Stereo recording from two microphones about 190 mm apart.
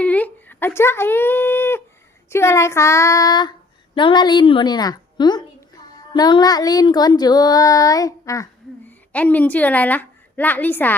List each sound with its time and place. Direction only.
0.0 s a sound: 10° left (ahead or behind)
2.3 s child singing: 15° left (ahead or behind)
3.9 s music: 25° left (ahead or behind)
8.9 s a woman's voice: 10° left (ahead or behind)